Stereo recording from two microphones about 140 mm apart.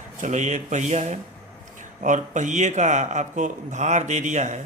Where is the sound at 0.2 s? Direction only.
60° right (ahead or behind).